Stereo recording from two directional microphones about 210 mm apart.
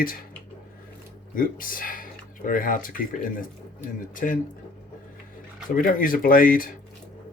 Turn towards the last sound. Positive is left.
turn(degrees=40)  # may be behind; listen again after turning